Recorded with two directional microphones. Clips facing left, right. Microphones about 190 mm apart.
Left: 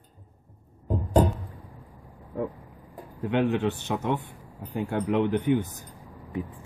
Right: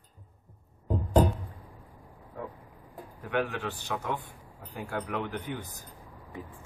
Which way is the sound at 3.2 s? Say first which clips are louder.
Left 7 dB; 20° left (ahead or behind).